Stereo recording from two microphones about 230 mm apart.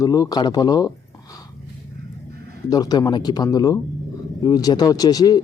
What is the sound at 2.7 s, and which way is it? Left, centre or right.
A man's voice, centre.